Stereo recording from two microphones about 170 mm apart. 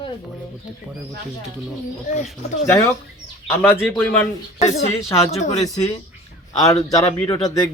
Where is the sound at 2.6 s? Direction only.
15° left (ahead or behind).